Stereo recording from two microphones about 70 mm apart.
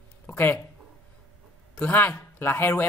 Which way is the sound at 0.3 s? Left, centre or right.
Left.